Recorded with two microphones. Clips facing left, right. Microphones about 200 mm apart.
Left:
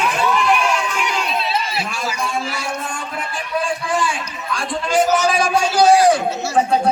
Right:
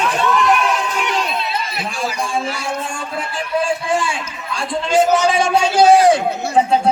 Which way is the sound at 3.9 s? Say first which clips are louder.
Right 1 dB; 25° right (ahead or behind).